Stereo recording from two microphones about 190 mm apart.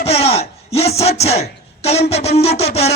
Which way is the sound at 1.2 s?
35° left (ahead or behind).